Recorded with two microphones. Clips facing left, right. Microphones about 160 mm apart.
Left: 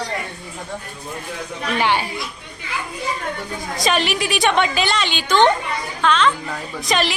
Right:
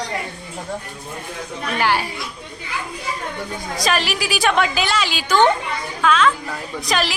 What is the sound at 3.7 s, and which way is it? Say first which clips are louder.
A woman's voice: left 2 dB; centre (ahead or behind).